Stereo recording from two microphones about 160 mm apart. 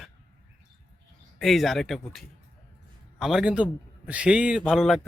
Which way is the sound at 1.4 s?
Centre (ahead or behind).